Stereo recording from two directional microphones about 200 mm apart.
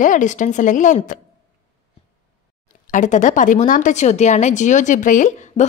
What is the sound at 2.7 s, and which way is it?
Speech, 40° left (ahead or behind).